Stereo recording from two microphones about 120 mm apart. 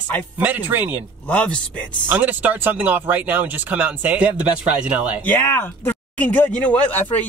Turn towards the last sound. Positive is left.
turn(degrees=10)  # may be behind; listen again after turning